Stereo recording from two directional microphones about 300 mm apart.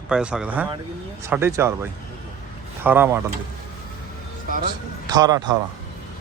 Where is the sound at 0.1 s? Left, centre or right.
Centre.